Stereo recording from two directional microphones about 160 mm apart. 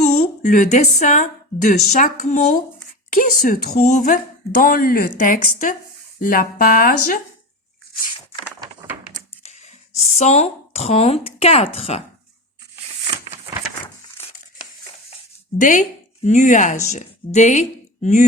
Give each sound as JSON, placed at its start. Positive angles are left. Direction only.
{"t": 0.4, "sound": "speech", "side_deg": 50}
{"t": 10.2, "sound": "speech", "side_deg": 40}
{"t": 15.5, "sound": "speech", "side_deg": 50}